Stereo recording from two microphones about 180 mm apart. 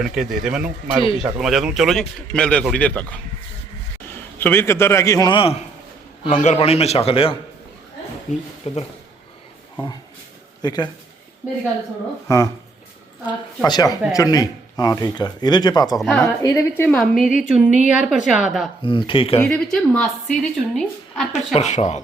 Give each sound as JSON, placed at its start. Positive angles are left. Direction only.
{"t": 0.0, "sound": "a woman's voice", "side_deg": -5}
{"t": 4.1, "sound": "a man's voice", "side_deg": 10}
{"t": 6.2, "sound": "a man's voice", "side_deg": 40}
{"t": 8.3, "sound": "a man's voice", "side_deg": 40}
{"t": 10.6, "sound": "a man's voice", "side_deg": 25}
{"t": 13.7, "sound": "speech", "side_deg": 20}
{"t": 16.0, "sound": "a woman's voice", "side_deg": 0}
{"t": 16.4, "sound": "a woman's voice", "side_deg": 15}
{"t": 18.8, "sound": "speech", "side_deg": 30}
{"t": 19.4, "sound": "a woman's voice", "side_deg": 5}
{"t": 21.3, "sound": "a man's voice", "side_deg": 40}